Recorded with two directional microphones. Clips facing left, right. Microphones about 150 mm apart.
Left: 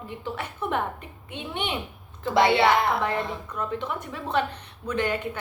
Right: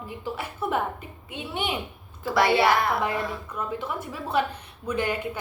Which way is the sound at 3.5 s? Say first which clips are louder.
Left 1 dB; 5° right (ahead or behind).